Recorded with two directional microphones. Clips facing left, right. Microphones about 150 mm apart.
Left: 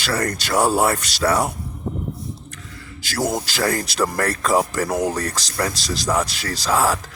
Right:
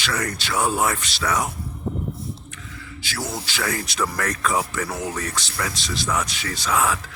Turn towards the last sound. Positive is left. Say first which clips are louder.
# left 3 dB
turn(degrees=35)  # may be behind; listen again after turning